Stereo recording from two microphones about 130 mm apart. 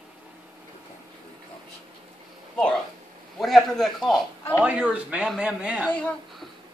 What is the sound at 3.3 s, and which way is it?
Speech, centre (ahead or behind).